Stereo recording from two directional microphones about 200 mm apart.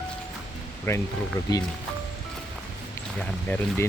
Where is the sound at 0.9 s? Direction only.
10° left (ahead or behind).